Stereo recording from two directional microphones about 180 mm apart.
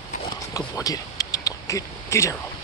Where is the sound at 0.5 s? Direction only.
20° left (ahead or behind).